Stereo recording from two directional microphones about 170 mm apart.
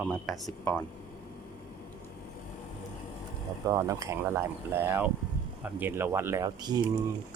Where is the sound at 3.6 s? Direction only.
20° right (ahead or behind).